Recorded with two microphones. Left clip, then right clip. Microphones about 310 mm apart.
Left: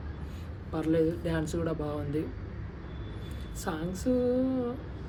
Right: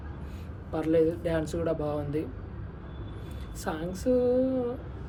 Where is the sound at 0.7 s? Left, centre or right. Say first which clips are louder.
Right 3 dB; centre.